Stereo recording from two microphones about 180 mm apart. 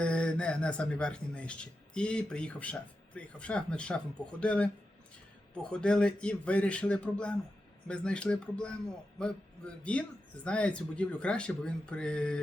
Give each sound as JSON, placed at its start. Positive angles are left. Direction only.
{"t": 0.0, "sound": "speech", "side_deg": 5}
{"t": 5.7, "sound": "speech", "side_deg": 5}